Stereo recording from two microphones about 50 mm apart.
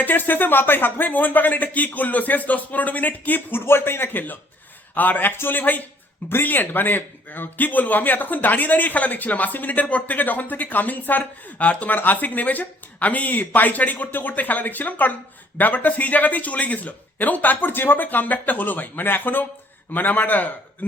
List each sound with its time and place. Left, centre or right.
0.0 s a man's voice: left
3.7 s speech: left
4.9 s a man's voice: left